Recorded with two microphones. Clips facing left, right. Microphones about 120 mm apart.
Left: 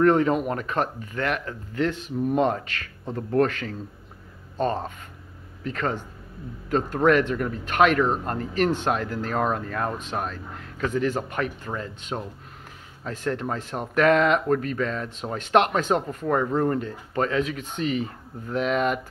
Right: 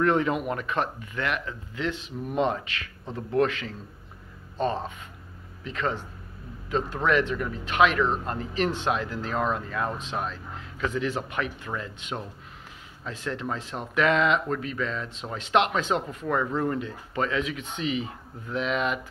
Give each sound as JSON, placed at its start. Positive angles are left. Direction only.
{"t": 0.0, "sound": "speech", "side_deg": 40}